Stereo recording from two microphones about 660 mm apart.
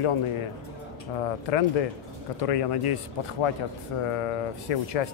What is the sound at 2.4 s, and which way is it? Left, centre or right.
Speech, left.